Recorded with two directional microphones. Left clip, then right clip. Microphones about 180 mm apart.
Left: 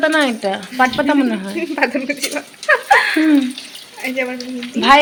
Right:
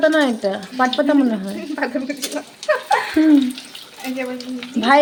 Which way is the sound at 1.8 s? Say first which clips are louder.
Left 5 dB; 35° left (ahead or behind).